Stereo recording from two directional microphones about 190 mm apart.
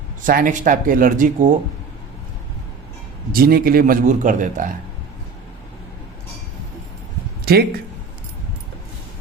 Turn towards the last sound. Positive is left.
turn(degrees=-55)  # may be behind; listen again after turning